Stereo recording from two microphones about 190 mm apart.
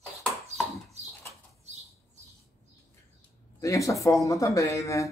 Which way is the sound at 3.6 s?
15° left (ahead or behind).